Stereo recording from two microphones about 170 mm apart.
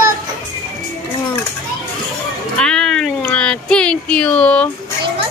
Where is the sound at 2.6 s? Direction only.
5° left (ahead or behind).